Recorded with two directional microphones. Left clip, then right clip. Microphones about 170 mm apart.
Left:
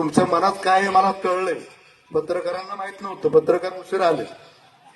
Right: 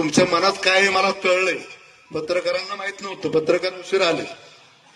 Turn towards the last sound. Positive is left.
turn(degrees=45)  # may be behind; listen again after turning